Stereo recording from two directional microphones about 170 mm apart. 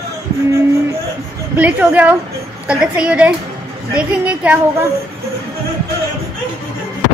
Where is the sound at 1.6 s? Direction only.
10° right (ahead or behind).